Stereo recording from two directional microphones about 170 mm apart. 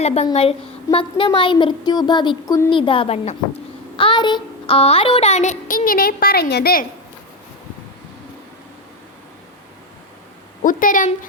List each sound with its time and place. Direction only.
0.0 s a woman's voice: 40° left (ahead or behind)
3.9 s child singing: 30° left (ahead or behind); by 6.8 s 65° left (ahead or behind)
10.6 s child singing: 50° left (ahead or behind)